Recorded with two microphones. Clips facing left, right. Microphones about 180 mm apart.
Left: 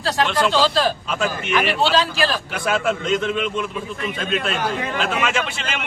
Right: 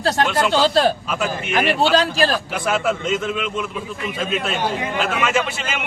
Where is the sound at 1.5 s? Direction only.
45° right (ahead or behind).